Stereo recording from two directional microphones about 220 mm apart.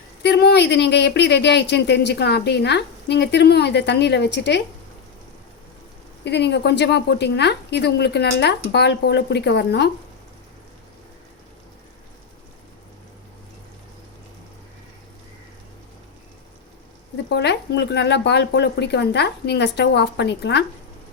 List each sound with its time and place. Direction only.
0.2 s speech: 50° left (ahead or behind)
6.2 s speech: 50° left (ahead or behind)
17.2 s speech: 50° left (ahead or behind)